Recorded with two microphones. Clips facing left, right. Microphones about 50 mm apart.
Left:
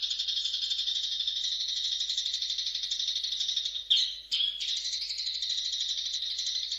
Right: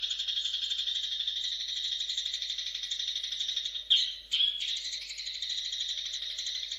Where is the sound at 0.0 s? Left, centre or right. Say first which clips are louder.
Left 1 dB; centre.